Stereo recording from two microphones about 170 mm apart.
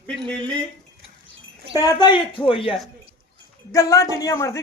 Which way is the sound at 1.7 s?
25° left (ahead or behind).